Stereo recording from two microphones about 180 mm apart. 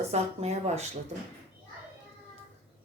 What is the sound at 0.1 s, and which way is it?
Speech, 35° right (ahead or behind).